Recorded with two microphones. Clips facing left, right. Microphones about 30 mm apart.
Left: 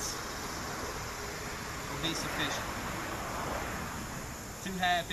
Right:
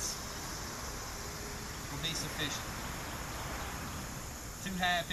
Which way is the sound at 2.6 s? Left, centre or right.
Left.